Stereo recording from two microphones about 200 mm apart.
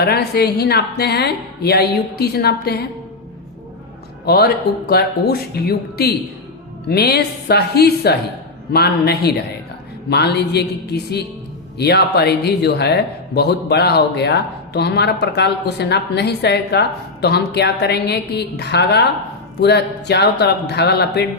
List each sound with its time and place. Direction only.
0.0 s a woman's voice: 55° left (ahead or behind)
4.3 s a woman's voice: 50° left (ahead or behind)